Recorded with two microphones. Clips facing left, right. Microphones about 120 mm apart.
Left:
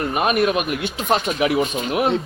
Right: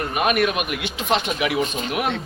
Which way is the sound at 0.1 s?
30° left (ahead or behind).